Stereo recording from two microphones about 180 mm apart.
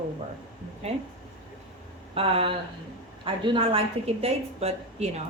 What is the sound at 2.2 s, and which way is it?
A woman's voice, 30° right (ahead or behind).